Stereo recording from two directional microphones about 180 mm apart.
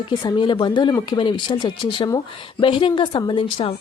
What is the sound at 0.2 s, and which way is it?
A woman's voice, 25° left (ahead or behind).